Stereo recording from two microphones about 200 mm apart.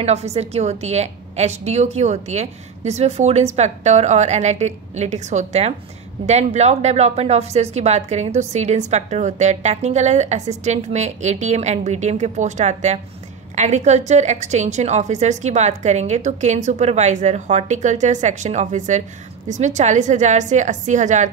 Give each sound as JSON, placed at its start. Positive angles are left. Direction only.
{"t": 0.0, "sound": "a woman's voice", "side_deg": -30}